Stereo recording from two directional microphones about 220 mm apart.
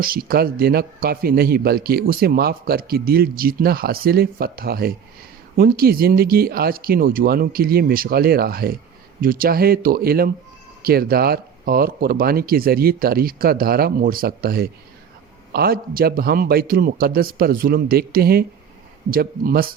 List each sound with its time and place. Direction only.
0.0 s a man's voice: 40° right (ahead or behind)